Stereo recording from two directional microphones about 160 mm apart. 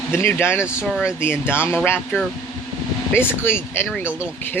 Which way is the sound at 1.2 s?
15° left (ahead or behind).